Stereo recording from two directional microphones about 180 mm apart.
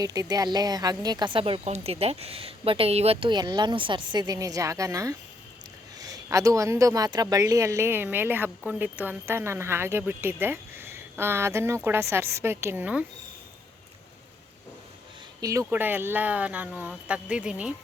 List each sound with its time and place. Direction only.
0.0 s speech: 20° right (ahead or behind)
15.4 s speech: 15° right (ahead or behind)